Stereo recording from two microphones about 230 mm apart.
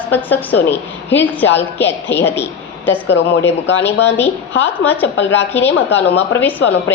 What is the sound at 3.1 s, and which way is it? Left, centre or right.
Speech, left.